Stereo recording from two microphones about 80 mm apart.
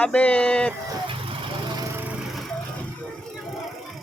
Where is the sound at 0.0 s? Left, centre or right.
Centre.